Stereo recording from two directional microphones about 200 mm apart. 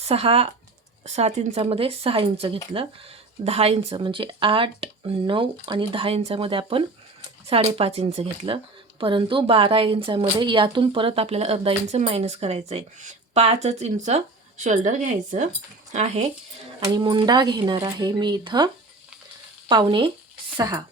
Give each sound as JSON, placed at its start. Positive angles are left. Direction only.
{"t": 0.0, "sound": "speech", "side_deg": -30}
{"t": 16.8, "sound": "speech", "side_deg": -20}